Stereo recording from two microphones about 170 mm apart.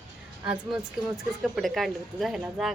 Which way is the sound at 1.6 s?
Centre (ahead or behind).